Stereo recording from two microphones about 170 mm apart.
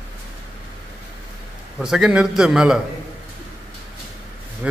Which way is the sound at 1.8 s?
5° right (ahead or behind).